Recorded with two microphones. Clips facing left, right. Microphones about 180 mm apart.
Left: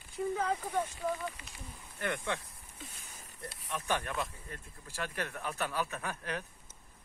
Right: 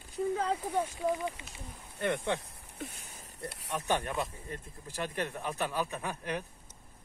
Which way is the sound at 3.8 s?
20° right (ahead or behind).